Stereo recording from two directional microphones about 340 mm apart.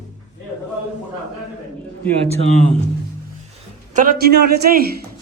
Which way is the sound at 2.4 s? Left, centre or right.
Left.